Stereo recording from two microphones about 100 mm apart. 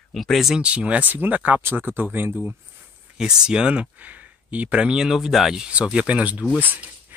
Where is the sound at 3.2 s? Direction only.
5° right (ahead or behind).